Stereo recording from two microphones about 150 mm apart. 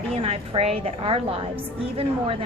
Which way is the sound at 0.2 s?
40° right (ahead or behind).